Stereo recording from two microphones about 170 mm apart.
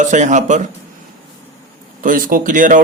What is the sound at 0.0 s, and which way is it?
Speech, 45° right (ahead or behind).